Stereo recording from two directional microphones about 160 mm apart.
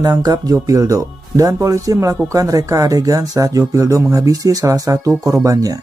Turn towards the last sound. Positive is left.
turn(degrees=-20)  # may be behind; listen again after turning